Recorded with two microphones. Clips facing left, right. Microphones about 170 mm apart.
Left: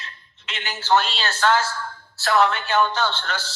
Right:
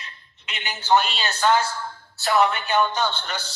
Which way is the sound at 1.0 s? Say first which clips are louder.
Even; centre (ahead or behind).